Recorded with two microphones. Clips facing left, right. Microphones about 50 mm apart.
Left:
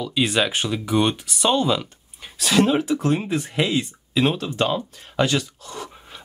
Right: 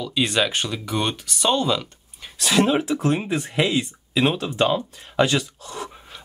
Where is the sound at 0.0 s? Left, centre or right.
Centre.